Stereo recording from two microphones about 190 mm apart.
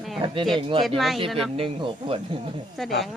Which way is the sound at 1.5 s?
25° right (ahead or behind).